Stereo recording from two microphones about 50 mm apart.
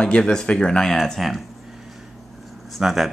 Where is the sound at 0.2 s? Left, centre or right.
Centre.